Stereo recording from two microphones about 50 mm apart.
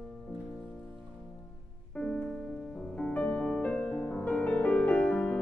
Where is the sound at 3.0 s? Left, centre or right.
Left.